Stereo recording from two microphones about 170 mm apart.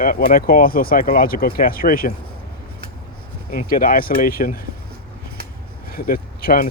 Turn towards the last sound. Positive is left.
turn(degrees=60)  # may be behind; listen again after turning